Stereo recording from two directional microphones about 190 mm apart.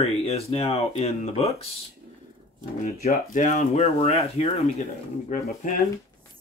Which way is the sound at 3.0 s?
40° left (ahead or behind).